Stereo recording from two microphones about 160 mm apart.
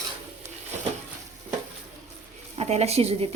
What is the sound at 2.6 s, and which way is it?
Speech, 40° right (ahead or behind).